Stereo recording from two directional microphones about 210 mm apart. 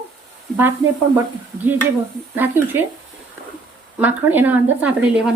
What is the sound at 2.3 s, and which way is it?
Speech, 10° right (ahead or behind).